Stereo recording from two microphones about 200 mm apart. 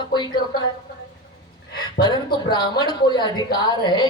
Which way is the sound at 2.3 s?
20° left (ahead or behind).